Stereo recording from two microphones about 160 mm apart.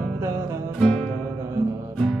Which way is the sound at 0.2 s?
20° right (ahead or behind).